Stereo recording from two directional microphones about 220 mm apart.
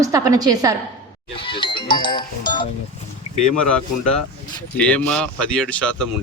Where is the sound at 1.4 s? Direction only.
20° left (ahead or behind).